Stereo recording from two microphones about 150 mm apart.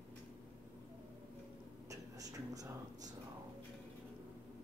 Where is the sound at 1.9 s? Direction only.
25° right (ahead or behind).